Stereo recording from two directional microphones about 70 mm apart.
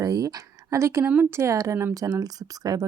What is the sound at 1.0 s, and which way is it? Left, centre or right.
Speech, right.